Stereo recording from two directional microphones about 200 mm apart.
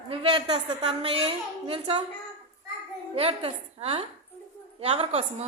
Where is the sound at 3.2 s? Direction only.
30° right (ahead or behind).